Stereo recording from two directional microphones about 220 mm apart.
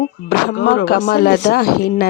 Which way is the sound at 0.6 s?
55° left (ahead or behind).